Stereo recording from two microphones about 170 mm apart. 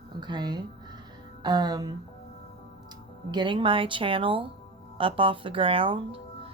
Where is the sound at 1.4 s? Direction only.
25° right (ahead or behind).